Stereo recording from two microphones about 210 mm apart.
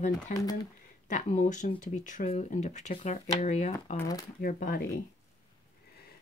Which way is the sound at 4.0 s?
15° left (ahead or behind).